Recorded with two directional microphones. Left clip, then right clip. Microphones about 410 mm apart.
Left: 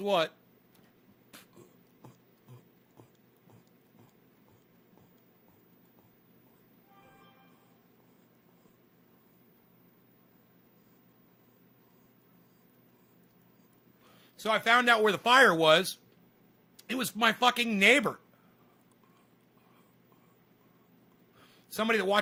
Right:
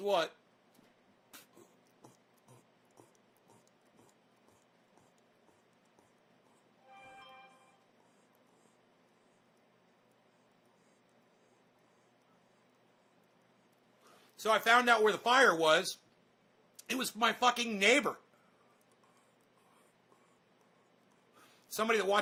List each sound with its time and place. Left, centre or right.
0.0 s speech: centre
14.3 s speech: centre
21.8 s speech: centre